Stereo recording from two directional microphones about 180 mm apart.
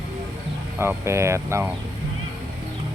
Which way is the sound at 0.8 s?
15° right (ahead or behind).